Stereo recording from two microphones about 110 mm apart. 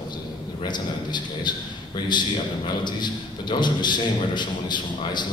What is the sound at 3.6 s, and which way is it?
A man's voice, 45° left (ahead or behind).